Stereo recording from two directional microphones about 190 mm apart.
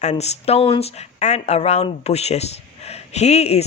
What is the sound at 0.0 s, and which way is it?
Speech, 35° left (ahead or behind).